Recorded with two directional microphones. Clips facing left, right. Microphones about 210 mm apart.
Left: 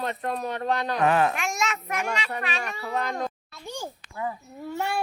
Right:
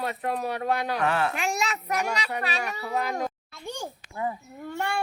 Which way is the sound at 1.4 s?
35° right (ahead or behind).